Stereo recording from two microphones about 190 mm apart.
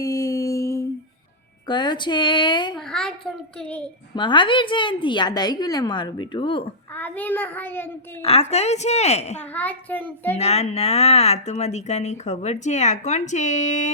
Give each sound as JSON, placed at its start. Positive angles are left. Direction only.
{"t": 0.0, "sound": "a sound", "side_deg": 20}
{"t": 1.6, "sound": "a woman's voice", "side_deg": 25}
{"t": 2.7, "sound": "a child's voice", "side_deg": 5}
{"t": 4.1, "sound": "a woman's voice", "side_deg": 25}
{"t": 6.9, "sound": "a child's voice", "side_deg": 10}
{"t": 8.2, "sound": "speech", "side_deg": 30}
{"t": 9.4, "sound": "a child's voice", "side_deg": 10}
{"t": 10.3, "sound": "speech", "side_deg": 35}